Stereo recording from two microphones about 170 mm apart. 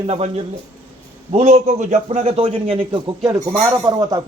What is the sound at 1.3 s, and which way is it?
Speech, 40° right (ahead or behind).